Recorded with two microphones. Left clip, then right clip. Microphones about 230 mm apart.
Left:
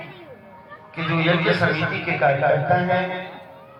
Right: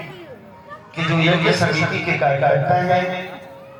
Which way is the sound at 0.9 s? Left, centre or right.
Right.